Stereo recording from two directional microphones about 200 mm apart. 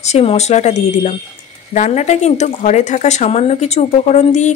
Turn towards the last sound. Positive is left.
turn(degrees=35)  # may be behind; listen again after turning